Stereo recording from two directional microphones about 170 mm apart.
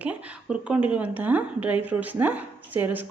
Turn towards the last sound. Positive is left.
turn(degrees=-10)  # may be behind; listen again after turning